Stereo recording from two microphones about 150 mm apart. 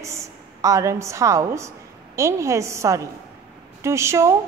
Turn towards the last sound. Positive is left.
turn(degrees=-20)  # may be behind; listen again after turning